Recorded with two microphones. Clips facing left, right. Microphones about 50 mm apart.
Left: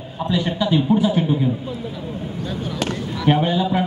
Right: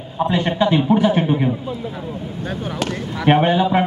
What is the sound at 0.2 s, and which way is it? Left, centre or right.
A man's voice, right.